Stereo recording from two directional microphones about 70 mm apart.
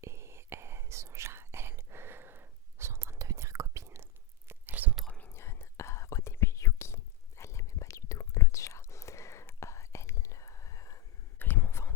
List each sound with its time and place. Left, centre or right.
0.0 s whispering: right
4.4 s whispering: right
5.0 s whispering: centre
5.3 s whispering: left
11.3 s a sound: left